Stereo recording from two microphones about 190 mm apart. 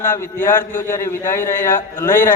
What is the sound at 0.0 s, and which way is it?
A man's voice, 10° left (ahead or behind).